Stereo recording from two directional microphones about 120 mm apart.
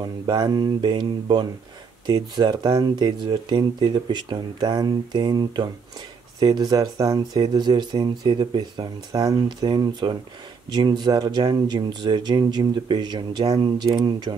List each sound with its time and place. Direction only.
0.0 s speech: 35° right (ahead or behind)